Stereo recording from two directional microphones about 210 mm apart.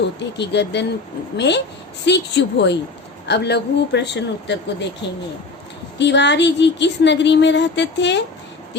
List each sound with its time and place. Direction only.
0.3 s speech: 55° left (ahead or behind)
6.0 s speech: 55° left (ahead or behind)